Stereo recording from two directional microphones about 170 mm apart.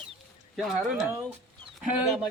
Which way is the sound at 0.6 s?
Centre (ahead or behind).